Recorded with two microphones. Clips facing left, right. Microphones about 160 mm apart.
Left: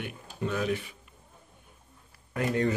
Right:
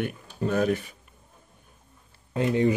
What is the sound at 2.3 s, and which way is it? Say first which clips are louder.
Speech: right 5 dB; 20° right (ahead or behind).